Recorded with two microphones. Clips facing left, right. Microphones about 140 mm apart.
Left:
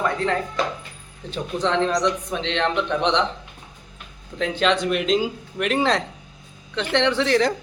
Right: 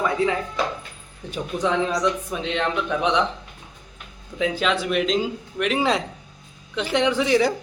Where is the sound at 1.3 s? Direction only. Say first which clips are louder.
Even; 10° right (ahead or behind).